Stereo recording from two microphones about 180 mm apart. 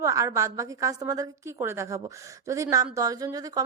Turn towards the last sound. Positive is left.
turn(degrees=-20)  # may be behind; listen again after turning